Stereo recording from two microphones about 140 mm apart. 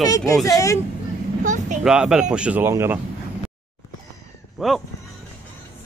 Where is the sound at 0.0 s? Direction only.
25° left (ahead or behind).